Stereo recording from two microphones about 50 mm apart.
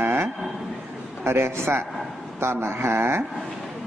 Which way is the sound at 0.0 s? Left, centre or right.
Right.